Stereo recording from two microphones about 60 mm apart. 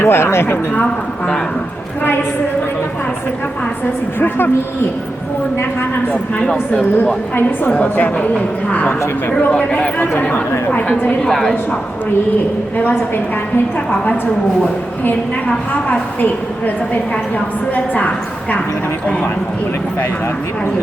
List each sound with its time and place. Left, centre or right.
0.0 s speech: left
4.2 s a woman's voice: left
6.4 s a woman's voice: centre
10.8 s speech: centre
12.7 s a woman's voice: left
15.0 s a woman's voice: left